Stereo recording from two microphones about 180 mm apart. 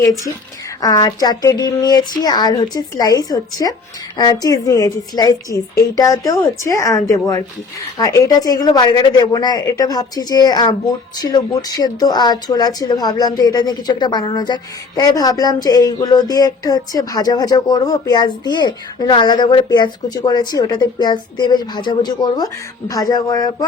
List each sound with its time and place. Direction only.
0.8 s speech: 20° left (ahead or behind)